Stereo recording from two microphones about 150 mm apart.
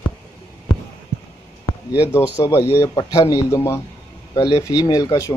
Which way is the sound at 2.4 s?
30° left (ahead or behind).